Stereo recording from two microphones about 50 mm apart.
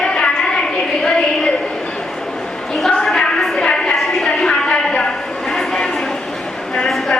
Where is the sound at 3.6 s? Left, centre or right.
Centre.